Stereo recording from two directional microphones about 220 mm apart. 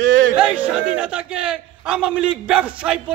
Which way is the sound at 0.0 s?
55° right (ahead or behind).